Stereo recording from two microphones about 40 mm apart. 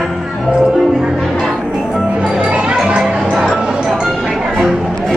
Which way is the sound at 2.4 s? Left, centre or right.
Right.